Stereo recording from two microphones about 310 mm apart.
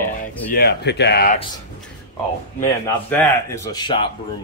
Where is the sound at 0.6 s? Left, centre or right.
Left.